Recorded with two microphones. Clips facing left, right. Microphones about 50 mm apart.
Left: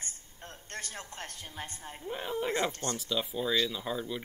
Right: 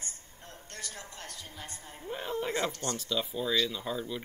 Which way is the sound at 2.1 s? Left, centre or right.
Centre.